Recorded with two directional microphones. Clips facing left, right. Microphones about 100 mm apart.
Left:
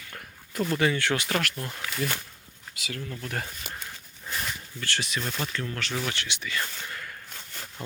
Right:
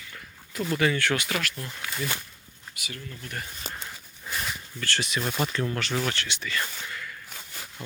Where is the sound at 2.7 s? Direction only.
90° left.